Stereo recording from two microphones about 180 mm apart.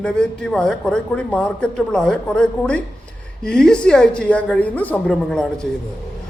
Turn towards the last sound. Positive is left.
turn(degrees=5)  # may be behind; listen again after turning